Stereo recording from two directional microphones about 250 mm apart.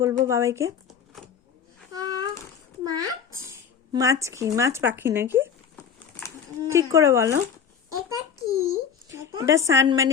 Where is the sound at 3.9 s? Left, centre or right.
Centre.